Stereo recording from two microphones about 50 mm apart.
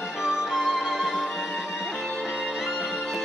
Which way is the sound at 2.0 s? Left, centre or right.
Centre.